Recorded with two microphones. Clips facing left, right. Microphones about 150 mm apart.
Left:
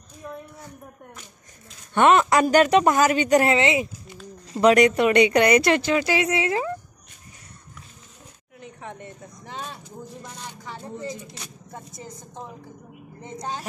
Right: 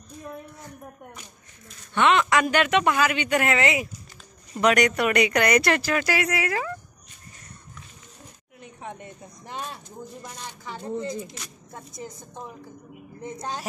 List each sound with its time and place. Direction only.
2.0 s speech: 40° left (ahead or behind)
3.5 s a woman's voice: 25° left (ahead or behind)